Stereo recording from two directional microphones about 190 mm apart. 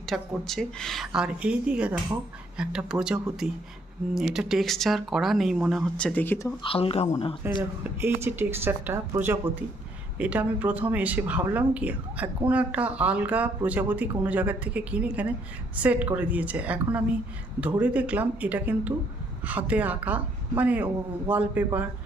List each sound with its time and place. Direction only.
0.0 s speech: centre (ahead or behind)
6.6 s speech: 30° left (ahead or behind)
7.6 s speech: 10° right (ahead or behind)